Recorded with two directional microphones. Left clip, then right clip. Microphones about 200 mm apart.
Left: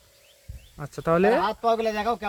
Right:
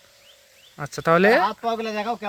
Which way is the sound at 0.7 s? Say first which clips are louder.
Right 4 dB; 10° right (ahead or behind).